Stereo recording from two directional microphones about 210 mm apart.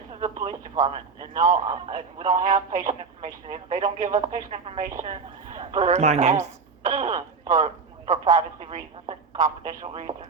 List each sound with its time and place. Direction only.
0.4 s a woman's voice: 35° right (ahead or behind)
1.7 s a man's voice: 20° right (ahead or behind)
2.4 s a woman's voice: 40° right (ahead or behind)
9.6 s a man's voice: 25° right (ahead or behind)